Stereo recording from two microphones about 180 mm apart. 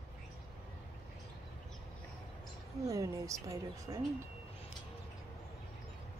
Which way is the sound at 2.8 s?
20° right (ahead or behind).